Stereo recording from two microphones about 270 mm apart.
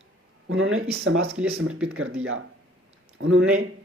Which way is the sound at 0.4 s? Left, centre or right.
Right.